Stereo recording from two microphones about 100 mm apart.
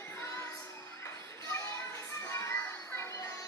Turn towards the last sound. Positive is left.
turn(degrees=30)  # may be behind; listen again after turning